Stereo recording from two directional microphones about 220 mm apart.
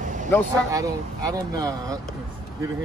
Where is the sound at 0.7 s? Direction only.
15° right (ahead or behind).